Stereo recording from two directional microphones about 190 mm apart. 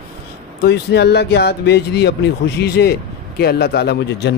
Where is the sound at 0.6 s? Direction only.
60° left (ahead or behind).